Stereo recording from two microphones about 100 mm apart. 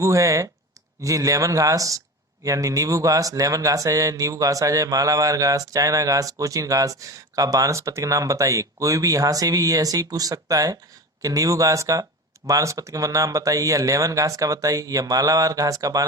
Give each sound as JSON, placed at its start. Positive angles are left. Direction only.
{"t": 0.0, "sound": "speech", "side_deg": -30}